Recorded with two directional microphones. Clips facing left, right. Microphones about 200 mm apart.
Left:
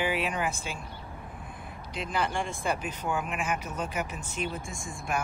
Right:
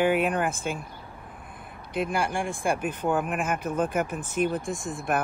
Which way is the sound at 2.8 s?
60° right (ahead or behind).